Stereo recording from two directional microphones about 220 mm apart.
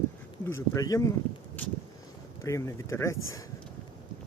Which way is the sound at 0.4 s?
10° left (ahead or behind).